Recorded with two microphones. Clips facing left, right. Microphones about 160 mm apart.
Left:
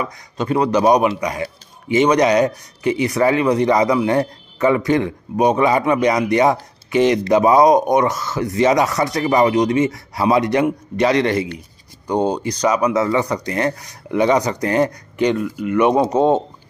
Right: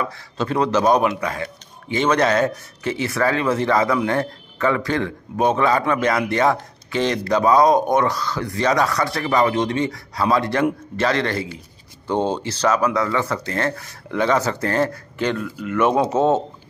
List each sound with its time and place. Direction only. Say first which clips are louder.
0.0 s speech: left 1 dB; 10° left (ahead or behind)
11.3 s speech: left 5 dB; centre (ahead or behind)
12.4 s speech: left 2 dB; 10° left (ahead or behind)